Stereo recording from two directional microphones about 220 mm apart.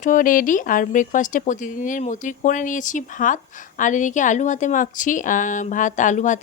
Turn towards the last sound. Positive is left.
turn(degrees=35)  # may be behind; listen again after turning